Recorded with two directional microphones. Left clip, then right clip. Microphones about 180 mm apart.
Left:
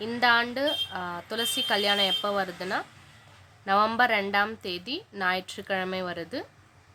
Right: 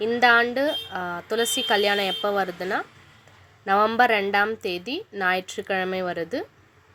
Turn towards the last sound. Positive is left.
turn(degrees=-15)  # may be behind; listen again after turning